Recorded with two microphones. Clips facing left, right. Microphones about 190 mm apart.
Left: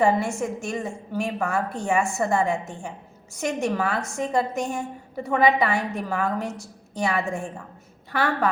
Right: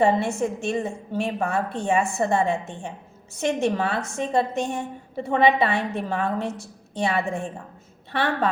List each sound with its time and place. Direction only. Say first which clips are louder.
0.0 s a woman's voice: right 1 dB; 25° right (ahead or behind)